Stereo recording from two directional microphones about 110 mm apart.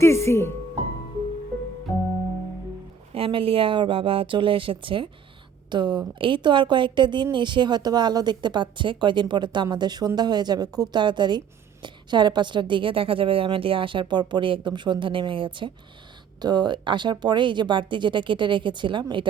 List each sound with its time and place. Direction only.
0.0 s speech: 25° left (ahead or behind)
3.2 s a woman's voice: 55° right (ahead or behind)